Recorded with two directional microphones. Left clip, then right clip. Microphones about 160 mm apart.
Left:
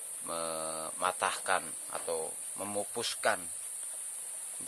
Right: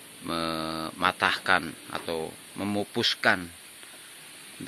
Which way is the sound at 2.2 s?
Centre (ahead or behind).